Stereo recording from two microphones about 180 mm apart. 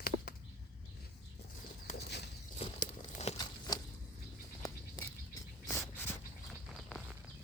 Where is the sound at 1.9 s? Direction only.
65° left (ahead or behind).